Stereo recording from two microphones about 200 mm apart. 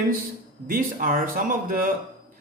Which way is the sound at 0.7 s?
45° right (ahead or behind).